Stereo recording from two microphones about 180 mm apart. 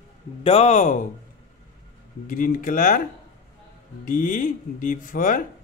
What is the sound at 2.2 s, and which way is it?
Speech, 50° left (ahead or behind).